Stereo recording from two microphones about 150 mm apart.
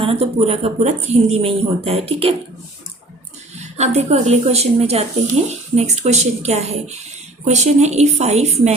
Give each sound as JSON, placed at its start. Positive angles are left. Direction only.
{"t": 0.0, "sound": "speech", "side_deg": -40}
{"t": 3.8, "sound": "speech", "side_deg": -45}